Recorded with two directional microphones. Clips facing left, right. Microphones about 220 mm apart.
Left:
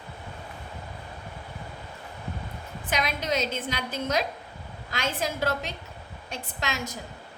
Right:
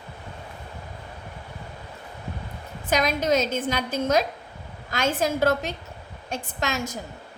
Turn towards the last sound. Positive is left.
turn(degrees=-45)  # may be behind; listen again after turning